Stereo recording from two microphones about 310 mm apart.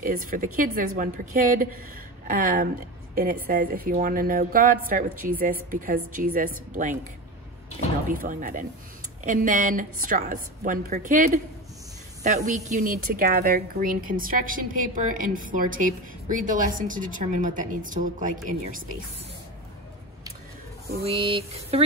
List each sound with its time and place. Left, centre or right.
0.0 s a woman's voice: right
8.1 s a woman's voice: right
21.0 s a woman's voice: centre